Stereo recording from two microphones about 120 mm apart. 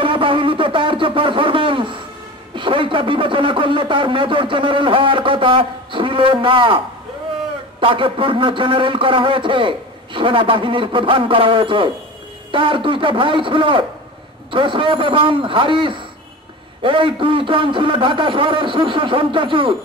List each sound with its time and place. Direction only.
0.0 s a sound: 45° right (ahead or behind)
2.5 s a man's voice: 45° right (ahead or behind)
7.8 s a man's voice: 45° right (ahead or behind)